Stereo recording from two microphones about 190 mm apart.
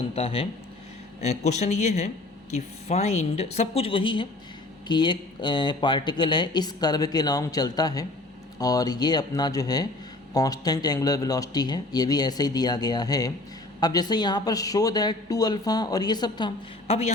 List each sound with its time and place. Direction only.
0.2 s a woman's voice: 30° left (ahead or behind)